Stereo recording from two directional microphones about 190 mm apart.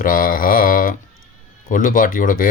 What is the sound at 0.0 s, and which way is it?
Mantra, 45° left (ahead or behind).